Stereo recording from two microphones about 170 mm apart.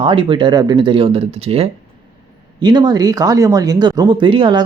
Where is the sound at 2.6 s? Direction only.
25° right (ahead or behind).